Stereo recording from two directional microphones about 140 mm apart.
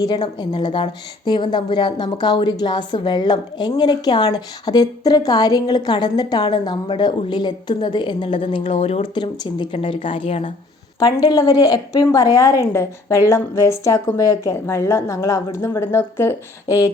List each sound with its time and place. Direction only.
0.0 s a woman's voice: 30° left (ahead or behind); by 9.0 s 50° left (ahead or behind)
9.1 s a woman's voice: 35° left (ahead or behind)
11.0 s a woman's voice: 30° left (ahead or behind)